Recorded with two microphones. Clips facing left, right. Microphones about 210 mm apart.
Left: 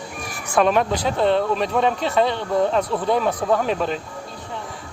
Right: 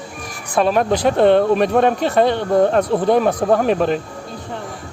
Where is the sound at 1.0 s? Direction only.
60° right (ahead or behind).